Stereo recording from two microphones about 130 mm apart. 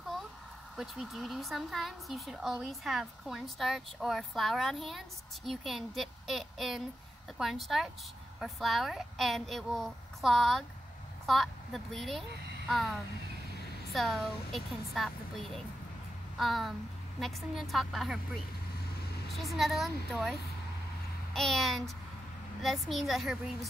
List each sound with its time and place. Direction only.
0.7 s a woman's voice: centre (ahead or behind)
13.9 s a woman's voice: centre (ahead or behind)
19.3 s a woman's voice: centre (ahead or behind)